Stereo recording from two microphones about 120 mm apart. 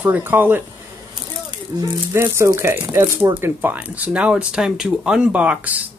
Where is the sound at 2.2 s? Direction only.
25° right (ahead or behind).